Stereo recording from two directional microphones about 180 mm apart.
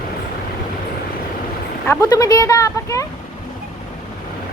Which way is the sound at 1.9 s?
20° left (ahead or behind).